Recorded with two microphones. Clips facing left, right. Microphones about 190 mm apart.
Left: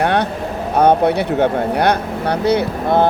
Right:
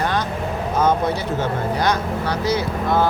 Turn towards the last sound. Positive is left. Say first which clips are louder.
# left 4 dB
turn(degrees=60)  # may be behind; listen again after turning